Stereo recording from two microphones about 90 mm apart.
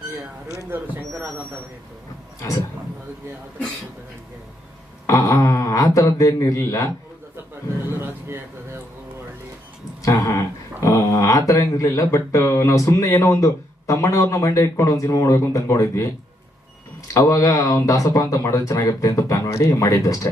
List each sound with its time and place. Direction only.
0.7 s speech: 25° right (ahead or behind)
5.0 s speech: 35° left (ahead or behind)
7.9 s speech: 30° right (ahead or behind)
10.0 s a sound: 40° left (ahead or behind)
10.9 s speech: 45° left (ahead or behind)
17.2 s speech: 40° left (ahead or behind)